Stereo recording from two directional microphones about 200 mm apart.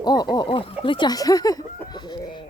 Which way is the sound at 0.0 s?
20° left (ahead or behind).